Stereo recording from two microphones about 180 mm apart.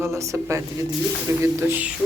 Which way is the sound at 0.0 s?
15° right (ahead or behind).